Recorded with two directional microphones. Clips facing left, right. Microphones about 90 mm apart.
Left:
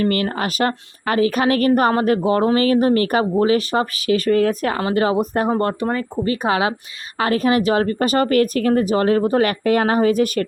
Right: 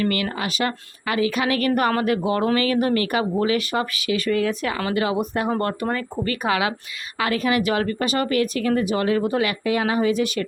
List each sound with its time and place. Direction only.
0.0 s a woman's voice: 40° left (ahead or behind)
5.5 s a woman's voice: 25° left (ahead or behind); by 10.4 s 45° left (ahead or behind)